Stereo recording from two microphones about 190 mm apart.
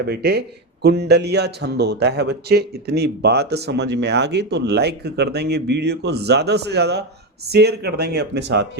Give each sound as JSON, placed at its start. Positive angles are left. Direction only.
{"t": 0.0, "sound": "speech", "side_deg": -55}